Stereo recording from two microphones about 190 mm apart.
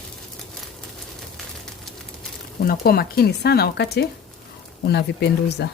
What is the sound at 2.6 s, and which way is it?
Speech, 50° left (ahead or behind).